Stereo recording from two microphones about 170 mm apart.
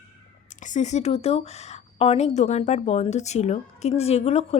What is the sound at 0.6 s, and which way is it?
A woman's voice, 45° left (ahead or behind).